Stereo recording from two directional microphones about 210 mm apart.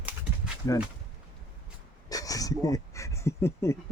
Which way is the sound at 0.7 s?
15° left (ahead or behind).